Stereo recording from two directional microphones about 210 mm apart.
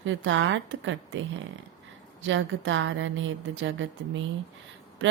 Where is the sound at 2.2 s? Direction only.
65° right (ahead or behind).